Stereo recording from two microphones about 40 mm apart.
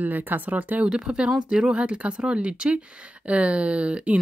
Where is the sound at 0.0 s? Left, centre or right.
Right.